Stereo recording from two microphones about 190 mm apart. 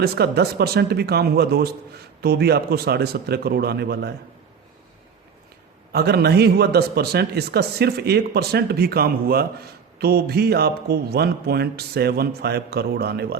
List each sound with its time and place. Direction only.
0.0 s a man's voice: 55° right (ahead or behind)
5.9 s a man's voice: 55° right (ahead or behind)